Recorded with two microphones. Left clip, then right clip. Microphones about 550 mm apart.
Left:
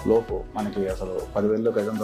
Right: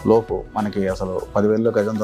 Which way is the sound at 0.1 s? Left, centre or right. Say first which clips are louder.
Right 5 dB; right.